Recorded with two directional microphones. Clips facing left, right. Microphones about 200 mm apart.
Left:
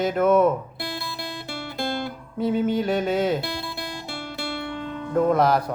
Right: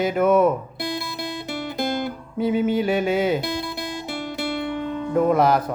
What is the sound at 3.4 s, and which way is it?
Guitar, 20° right (ahead or behind).